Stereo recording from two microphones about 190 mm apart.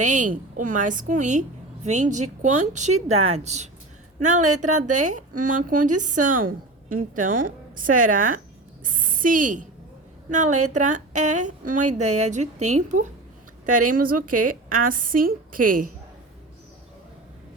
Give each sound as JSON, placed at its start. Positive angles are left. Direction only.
{"t": 0.0, "sound": "a woman's voice", "side_deg": -40}